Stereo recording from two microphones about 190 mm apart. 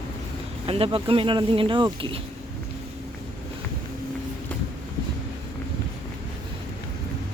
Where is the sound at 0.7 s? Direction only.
30° right (ahead or behind).